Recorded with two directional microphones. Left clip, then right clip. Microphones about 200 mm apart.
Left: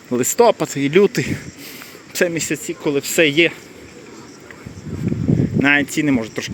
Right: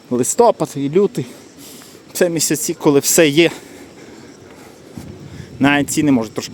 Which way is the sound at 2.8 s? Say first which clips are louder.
Right 4 dB; 40° right (ahead or behind).